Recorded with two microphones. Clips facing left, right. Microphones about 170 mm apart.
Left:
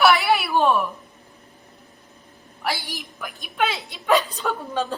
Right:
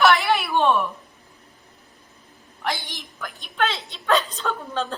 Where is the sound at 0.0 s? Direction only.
5° left (ahead or behind).